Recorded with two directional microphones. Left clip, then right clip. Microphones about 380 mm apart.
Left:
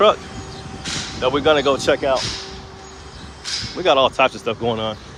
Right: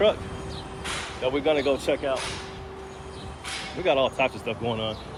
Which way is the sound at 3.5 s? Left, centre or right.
Centre.